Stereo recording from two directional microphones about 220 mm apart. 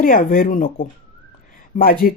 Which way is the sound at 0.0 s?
40° left (ahead or behind).